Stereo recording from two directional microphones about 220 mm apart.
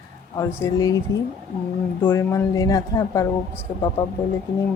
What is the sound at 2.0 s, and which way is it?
A woman's voice, 10° left (ahead or behind).